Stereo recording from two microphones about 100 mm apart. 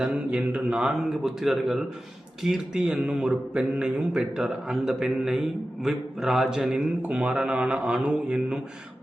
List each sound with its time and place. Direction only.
0.0 s speech: 10° right (ahead or behind)